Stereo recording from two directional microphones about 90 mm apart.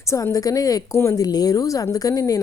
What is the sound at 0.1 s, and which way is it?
A woman's voice, 35° left (ahead or behind).